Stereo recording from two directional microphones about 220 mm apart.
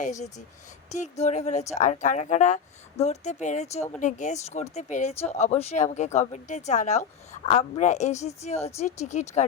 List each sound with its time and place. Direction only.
0.0 s speech: 35° left (ahead or behind)